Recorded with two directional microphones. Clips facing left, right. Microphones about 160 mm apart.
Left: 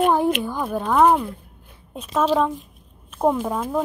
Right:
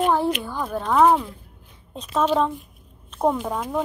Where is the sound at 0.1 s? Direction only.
15° left (ahead or behind).